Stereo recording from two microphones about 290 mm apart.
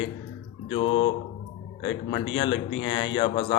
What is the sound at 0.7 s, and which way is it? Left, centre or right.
Speech, centre.